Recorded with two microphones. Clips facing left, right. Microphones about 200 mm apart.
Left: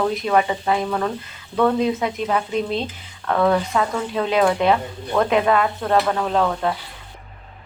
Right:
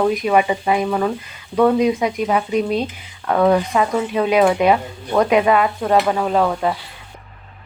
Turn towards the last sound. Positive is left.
turn(degrees=-10)  # may be behind; listen again after turning